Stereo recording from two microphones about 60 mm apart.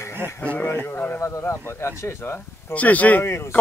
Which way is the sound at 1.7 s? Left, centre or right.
Left.